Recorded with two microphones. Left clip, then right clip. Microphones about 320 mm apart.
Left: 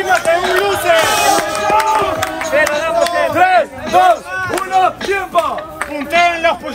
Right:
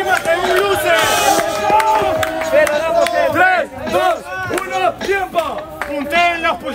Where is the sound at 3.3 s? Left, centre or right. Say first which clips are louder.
Left 2 dB; centre.